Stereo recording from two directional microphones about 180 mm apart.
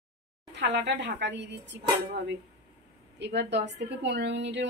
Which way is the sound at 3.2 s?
70° right (ahead or behind).